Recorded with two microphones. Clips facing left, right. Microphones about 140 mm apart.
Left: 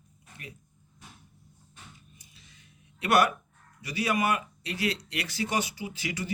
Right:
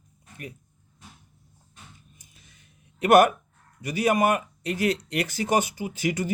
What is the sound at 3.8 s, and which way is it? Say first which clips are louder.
Speech: right 6 dB; 50° right (ahead or behind).